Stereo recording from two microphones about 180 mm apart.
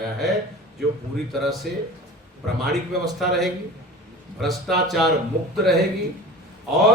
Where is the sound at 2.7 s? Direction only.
Centre (ahead or behind).